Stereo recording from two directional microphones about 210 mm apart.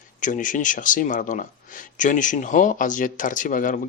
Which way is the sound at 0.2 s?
40° left (ahead or behind).